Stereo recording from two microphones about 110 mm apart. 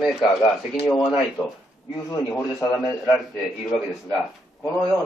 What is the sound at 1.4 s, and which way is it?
A man's voice, 25° left (ahead or behind).